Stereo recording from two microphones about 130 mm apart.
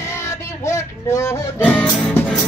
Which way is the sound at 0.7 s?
25° left (ahead or behind).